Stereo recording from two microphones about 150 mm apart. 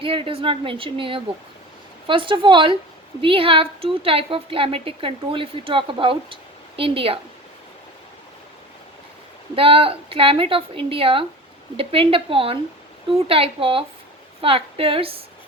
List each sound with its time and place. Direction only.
0.0 s a woman's voice: 35° right (ahead or behind)
9.6 s a woman's voice: 35° right (ahead or behind)